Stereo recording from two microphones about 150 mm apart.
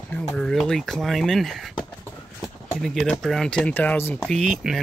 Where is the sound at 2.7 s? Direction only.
5° left (ahead or behind).